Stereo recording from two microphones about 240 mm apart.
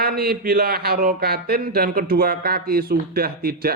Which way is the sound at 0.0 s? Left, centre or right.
Right.